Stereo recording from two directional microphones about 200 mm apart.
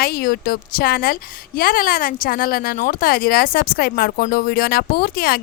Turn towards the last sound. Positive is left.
turn(degrees=50)  # may be behind; listen again after turning